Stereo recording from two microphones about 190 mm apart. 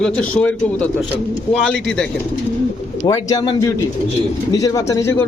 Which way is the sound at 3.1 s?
20° left (ahead or behind).